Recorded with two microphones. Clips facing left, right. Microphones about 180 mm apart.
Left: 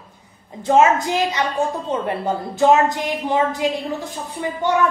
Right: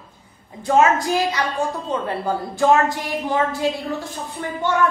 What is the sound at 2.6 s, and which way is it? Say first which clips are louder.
A woman's voice: left 2 dB; 20° left (ahead or behind).